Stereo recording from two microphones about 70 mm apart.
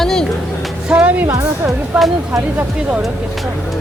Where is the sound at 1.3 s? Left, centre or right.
Right.